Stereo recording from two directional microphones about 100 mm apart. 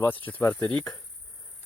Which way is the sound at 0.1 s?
15° left (ahead or behind).